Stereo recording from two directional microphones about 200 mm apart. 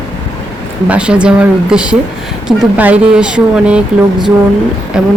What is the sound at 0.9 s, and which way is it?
Speech, 5° right (ahead or behind).